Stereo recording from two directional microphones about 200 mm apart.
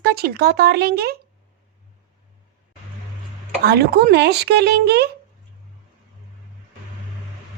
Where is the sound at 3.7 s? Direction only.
55° right (ahead or behind).